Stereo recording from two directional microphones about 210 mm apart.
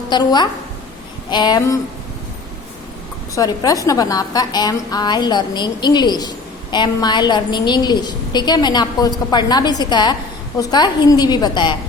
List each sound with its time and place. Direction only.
0.1 s a woman's voice: 20° left (ahead or behind)
3.3 s a woman's voice: 15° left (ahead or behind)